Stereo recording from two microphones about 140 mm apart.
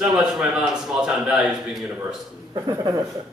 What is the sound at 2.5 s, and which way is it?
Speech, 30° right (ahead or behind).